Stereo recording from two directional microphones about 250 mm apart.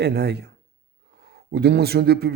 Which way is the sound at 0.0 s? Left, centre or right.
Right.